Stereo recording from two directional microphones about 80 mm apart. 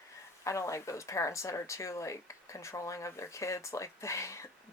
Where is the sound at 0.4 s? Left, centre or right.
Left.